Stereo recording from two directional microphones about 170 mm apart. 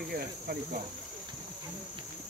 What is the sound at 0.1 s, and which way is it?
Speech, 60° right (ahead or behind).